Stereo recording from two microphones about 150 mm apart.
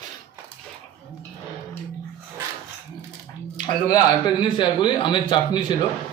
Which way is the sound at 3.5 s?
30° left (ahead or behind).